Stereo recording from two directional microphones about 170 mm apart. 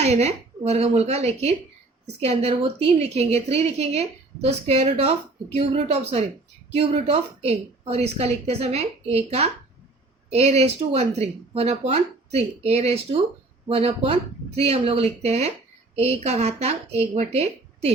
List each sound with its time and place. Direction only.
0.0 s a woman's voice: 40° right (ahead or behind)